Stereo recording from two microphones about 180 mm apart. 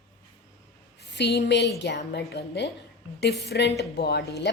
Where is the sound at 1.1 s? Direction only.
70° left (ahead or behind).